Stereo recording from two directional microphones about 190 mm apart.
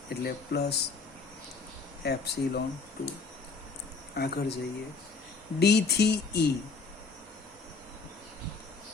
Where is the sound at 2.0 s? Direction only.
55° left (ahead or behind).